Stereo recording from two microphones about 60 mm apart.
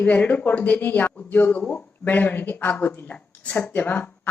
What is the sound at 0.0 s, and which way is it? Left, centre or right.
A woman's voice, left.